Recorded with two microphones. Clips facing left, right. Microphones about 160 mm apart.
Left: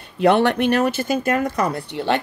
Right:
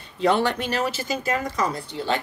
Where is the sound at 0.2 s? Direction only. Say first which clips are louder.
Left 5 dB; 60° left (ahead or behind).